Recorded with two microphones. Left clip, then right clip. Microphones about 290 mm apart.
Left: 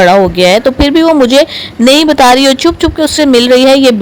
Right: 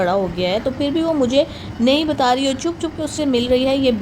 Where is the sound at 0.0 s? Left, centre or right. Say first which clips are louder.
Left 13 dB; left.